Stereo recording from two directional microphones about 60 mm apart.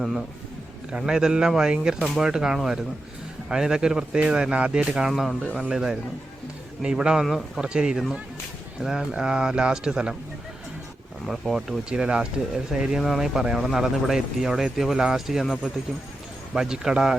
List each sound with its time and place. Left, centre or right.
0.0 s speech: centre
0.9 s speech: centre
5.1 s speech: centre
7.3 s speech: centre
7.6 s speech: centre
11.3 s speech: centre
11.9 s speech: centre
16.6 s speech: centre